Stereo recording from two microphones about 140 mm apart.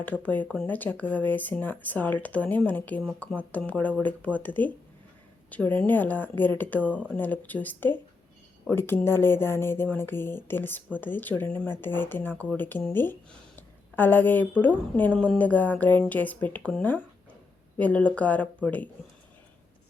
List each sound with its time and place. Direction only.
0.0 s a woman's voice: 10° left (ahead or behind)